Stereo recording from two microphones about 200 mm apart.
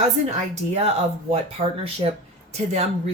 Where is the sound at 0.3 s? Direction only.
35° right (ahead or behind).